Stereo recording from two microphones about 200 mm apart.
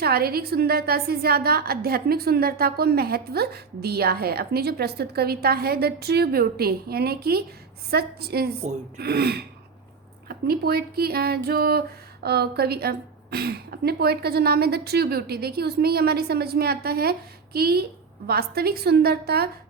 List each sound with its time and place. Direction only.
0.0 s speech: 50° right (ahead or behind)